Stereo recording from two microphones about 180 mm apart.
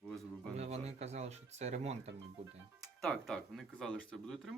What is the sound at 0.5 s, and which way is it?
Speech, 35° right (ahead or behind).